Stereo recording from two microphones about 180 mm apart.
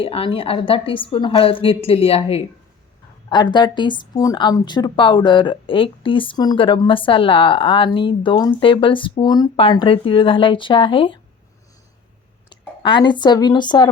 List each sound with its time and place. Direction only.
0.0 s a woman's voice: 30° left (ahead or behind)
12.5 s a woman's voice: 25° left (ahead or behind)